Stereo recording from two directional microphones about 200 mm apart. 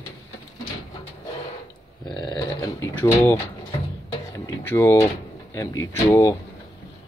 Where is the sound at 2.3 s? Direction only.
15° left (ahead or behind).